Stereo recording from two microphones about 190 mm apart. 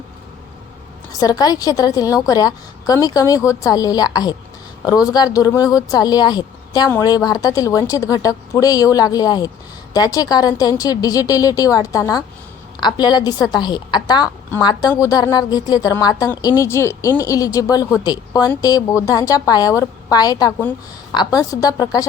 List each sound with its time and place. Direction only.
1.2 s speech: 20° left (ahead or behind)